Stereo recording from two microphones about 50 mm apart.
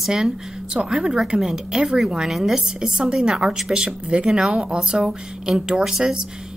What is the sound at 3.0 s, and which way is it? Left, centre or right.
Speech, centre.